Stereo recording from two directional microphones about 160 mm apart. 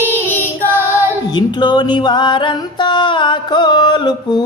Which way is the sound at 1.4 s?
25° left (ahead or behind).